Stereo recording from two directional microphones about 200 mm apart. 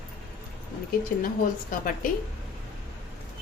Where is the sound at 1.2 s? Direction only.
45° left (ahead or behind).